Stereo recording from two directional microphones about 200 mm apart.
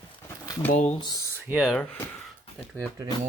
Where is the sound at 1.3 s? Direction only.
5° right (ahead or behind).